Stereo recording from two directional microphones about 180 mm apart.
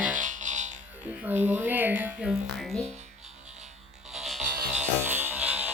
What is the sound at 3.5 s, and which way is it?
Frog, 35° right (ahead or behind).